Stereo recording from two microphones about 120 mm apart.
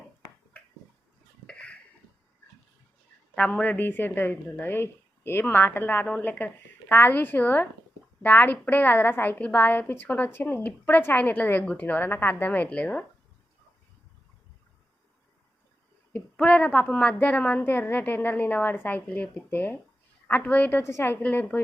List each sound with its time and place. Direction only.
1.5 s a sound: 10° left (ahead or behind)
3.3 s a woman's voice: 10° left (ahead or behind)
16.1 s a woman's voice: 10° left (ahead or behind)